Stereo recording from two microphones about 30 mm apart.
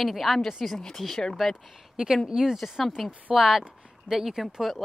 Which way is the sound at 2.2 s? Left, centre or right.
Centre.